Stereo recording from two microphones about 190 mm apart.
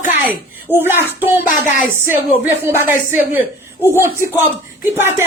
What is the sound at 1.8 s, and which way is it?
Speech, 45° left (ahead or behind).